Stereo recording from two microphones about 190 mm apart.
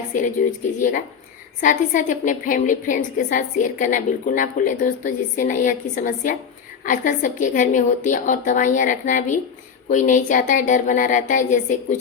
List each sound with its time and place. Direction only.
0.8 s a woman's voice: 45° left (ahead or behind)